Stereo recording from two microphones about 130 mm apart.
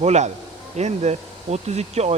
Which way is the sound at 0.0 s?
60° right (ahead or behind).